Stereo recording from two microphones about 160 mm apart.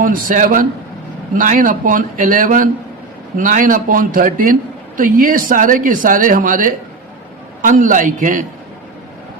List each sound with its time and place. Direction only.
0.0 s speech: 55° right (ahead or behind)